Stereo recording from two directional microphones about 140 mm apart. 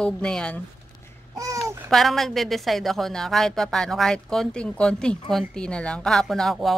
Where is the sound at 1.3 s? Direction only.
25° right (ahead or behind).